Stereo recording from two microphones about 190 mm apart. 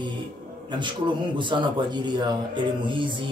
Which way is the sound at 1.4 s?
25° right (ahead or behind).